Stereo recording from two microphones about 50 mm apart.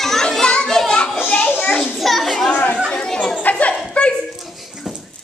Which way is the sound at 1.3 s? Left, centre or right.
Left.